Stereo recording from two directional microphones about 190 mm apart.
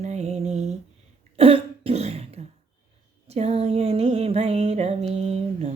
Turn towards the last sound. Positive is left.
turn(degrees=-35)  # may be behind; listen again after turning